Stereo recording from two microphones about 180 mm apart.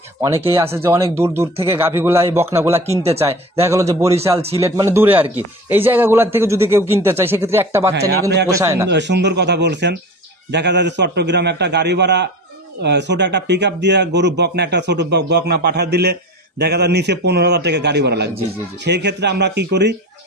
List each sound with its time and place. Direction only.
0.7 s a man's voice: 15° right (ahead or behind)
3.0 s speech: 35° right (ahead or behind)
3.6 s a man's voice: 15° right (ahead or behind)
4.4 s speech: 35° right (ahead or behind)
4.8 s a man's voice: 10° right (ahead or behind)
8.8 s a man's voice: 75° right (ahead or behind)